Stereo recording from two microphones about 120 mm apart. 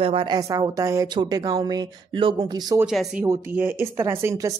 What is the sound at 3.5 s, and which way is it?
Speech, 20° right (ahead or behind).